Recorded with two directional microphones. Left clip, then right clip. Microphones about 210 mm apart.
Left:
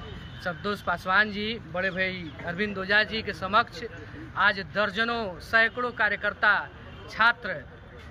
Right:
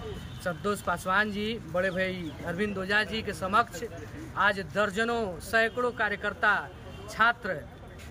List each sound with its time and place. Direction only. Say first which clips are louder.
0.4 s speech: even; 10° right (ahead or behind)